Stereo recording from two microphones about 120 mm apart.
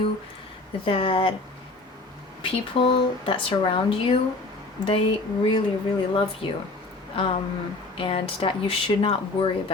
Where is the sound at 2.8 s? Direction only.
55° left (ahead or behind).